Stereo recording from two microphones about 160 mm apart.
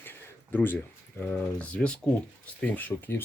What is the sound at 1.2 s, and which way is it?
Speech, 10° left (ahead or behind).